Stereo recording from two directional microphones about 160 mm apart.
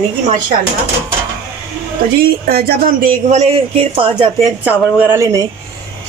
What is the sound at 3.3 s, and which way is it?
Speech, 40° right (ahead or behind).